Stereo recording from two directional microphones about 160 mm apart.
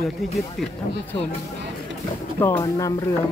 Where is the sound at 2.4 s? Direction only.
15° left (ahead or behind).